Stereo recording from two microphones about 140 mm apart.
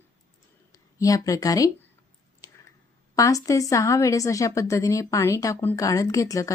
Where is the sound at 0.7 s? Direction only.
25° left (ahead or behind).